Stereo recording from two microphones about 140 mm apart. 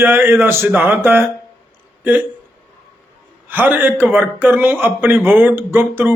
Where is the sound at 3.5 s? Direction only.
15° right (ahead or behind).